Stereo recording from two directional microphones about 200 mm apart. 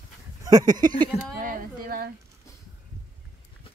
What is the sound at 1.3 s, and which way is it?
Speech, 45° right (ahead or behind).